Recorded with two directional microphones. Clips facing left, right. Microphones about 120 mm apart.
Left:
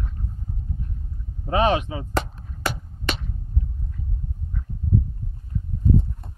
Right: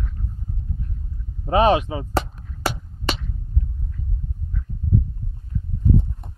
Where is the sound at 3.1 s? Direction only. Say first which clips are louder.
Right 2 dB; 30° right (ahead or behind).